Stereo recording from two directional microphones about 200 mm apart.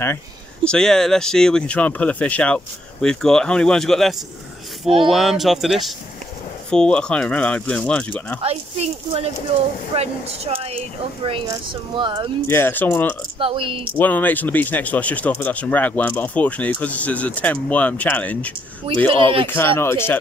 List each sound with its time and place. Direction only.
0.7 s speech: 5° left (ahead or behind)
4.8 s a woman's voice: 25° right (ahead or behind)
5.1 s speech: centre (ahead or behind)
8.4 s a woman's voice: 30° right (ahead or behind)
12.4 s speech: 10° left (ahead or behind)
13.4 s a woman's voice: 25° right (ahead or behind)
13.9 s speech: 10° left (ahead or behind)
19.0 s a woman's voice: 25° right (ahead or behind)
19.4 s speech: 10° left (ahead or behind)